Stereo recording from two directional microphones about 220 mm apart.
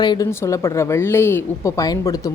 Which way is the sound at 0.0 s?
15° left (ahead or behind).